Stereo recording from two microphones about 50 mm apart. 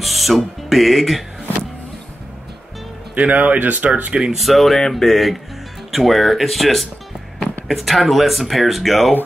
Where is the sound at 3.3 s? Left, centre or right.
Right.